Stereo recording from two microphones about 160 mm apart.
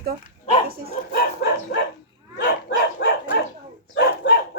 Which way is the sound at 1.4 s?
90° left.